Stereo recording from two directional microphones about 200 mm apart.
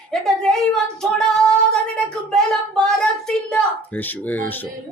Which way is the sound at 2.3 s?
5° left (ahead or behind).